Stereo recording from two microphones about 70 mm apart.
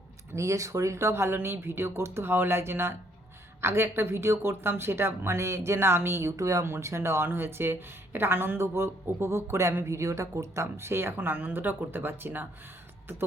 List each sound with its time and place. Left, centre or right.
0.3 s speech: right
6.7 s speech: right